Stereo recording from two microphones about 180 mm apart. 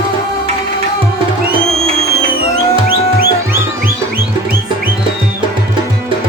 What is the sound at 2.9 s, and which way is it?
Music, 55° right (ahead or behind).